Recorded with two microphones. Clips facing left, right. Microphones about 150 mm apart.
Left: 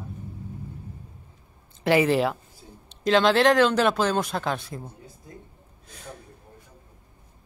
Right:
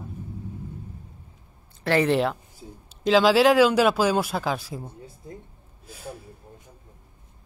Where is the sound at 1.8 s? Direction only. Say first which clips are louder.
Left 2 dB; 15° left (ahead or behind).